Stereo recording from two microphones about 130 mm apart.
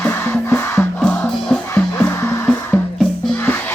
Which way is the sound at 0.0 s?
15° left (ahead or behind).